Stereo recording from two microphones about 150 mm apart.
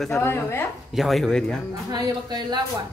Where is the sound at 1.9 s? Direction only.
30° right (ahead or behind).